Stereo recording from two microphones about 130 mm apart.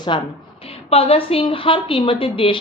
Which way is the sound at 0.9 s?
50° left (ahead or behind).